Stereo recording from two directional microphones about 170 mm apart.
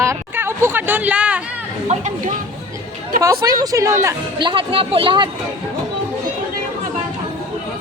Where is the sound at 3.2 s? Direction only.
20° right (ahead or behind).